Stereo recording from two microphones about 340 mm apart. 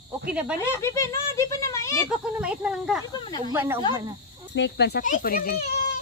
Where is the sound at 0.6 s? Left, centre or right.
Centre.